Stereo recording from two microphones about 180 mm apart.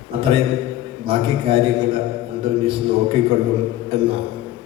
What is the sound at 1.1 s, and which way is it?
Speech, 30° right (ahead or behind).